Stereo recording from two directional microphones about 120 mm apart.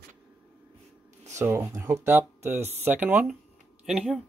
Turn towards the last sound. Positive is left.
turn(degrees=0)  # may be behind; listen again after turning